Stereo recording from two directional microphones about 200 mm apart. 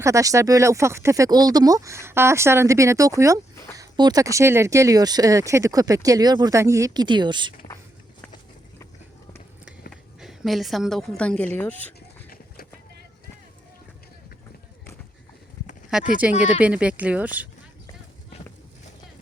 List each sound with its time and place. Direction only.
0.0 s speech: 15° right (ahead or behind)
9.9 s a woman's voice: centre (ahead or behind)
11.9 s a sound: 50° left (ahead or behind)
15.9 s speech: 5° right (ahead or behind)